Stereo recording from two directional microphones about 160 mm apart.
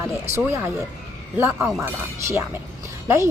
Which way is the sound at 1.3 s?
15° right (ahead or behind).